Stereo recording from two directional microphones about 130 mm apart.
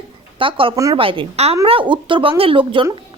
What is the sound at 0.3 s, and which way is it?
A woman's voice, 40° right (ahead or behind).